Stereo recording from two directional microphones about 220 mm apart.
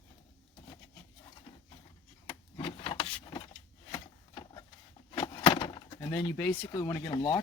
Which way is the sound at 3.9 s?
20° left (ahead or behind).